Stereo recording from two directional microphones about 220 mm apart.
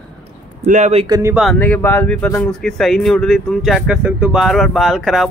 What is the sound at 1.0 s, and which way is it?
Speech, 15° right (ahead or behind).